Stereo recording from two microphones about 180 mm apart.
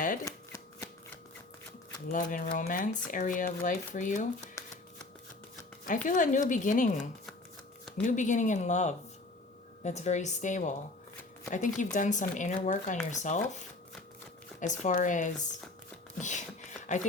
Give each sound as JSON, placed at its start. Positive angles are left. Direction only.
{"t": 0.3, "sound": "shuffling cards", "side_deg": 15}
{"t": 2.1, "sound": "speech", "side_deg": 50}
{"t": 4.6, "sound": "shuffling cards", "side_deg": 15}
{"t": 6.1, "sound": "a woman's voice", "side_deg": 45}
{"t": 14.6, "sound": "speech", "side_deg": 40}
{"t": 16.1, "sound": "a sound", "side_deg": 45}
{"t": 16.8, "sound": "speech", "side_deg": 45}